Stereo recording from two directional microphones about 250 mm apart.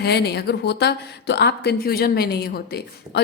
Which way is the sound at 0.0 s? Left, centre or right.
Left.